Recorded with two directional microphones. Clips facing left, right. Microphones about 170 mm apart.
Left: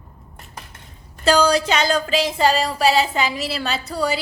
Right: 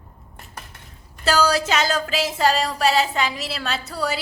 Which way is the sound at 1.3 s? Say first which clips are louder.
Left 3 dB; 5° right (ahead or behind).